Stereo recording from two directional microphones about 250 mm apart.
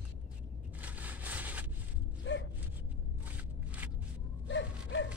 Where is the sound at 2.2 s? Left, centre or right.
Left.